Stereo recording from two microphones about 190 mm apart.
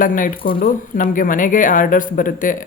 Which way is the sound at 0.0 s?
45° left (ahead or behind).